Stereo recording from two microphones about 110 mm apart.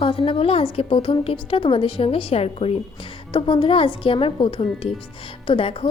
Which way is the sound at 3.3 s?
50° left (ahead or behind).